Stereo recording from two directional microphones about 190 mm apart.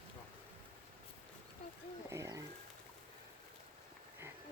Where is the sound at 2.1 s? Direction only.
15° right (ahead or behind).